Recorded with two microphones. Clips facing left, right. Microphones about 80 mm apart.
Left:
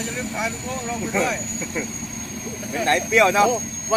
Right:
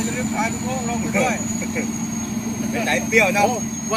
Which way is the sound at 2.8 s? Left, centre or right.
Left.